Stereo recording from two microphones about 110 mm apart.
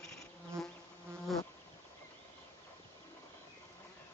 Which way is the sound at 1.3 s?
Centre (ahead or behind).